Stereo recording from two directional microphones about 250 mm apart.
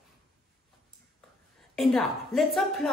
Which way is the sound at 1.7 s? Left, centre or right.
Centre.